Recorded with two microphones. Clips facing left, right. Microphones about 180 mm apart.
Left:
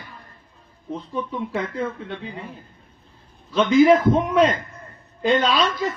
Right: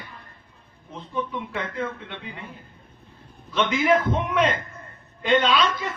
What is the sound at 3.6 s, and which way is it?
Speech, 35° left (ahead or behind).